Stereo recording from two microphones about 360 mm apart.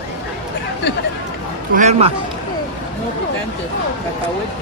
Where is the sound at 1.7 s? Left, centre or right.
Centre.